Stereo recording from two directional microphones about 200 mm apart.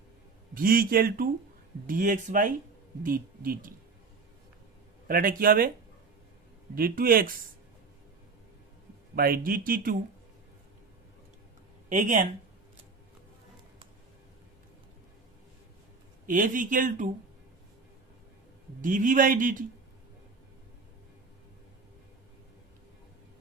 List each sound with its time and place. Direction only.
0.5 s speech: 45° right (ahead or behind)
5.0 s speech: 45° right (ahead or behind)
6.7 s speech: 45° right (ahead or behind)
9.1 s speech: 45° right (ahead or behind)
11.9 s speech: 40° right (ahead or behind)
16.2 s speech: 40° right (ahead or behind)
18.8 s speech: 40° right (ahead or behind)